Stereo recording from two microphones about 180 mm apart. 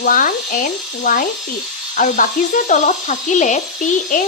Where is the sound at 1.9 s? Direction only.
45° left (ahead or behind).